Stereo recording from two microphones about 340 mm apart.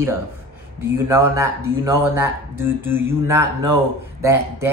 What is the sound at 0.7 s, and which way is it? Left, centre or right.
Speech, centre.